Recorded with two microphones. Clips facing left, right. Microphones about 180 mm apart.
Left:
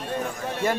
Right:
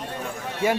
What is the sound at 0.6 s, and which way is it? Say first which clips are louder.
Speech: right 2 dB; 10° right (ahead or behind).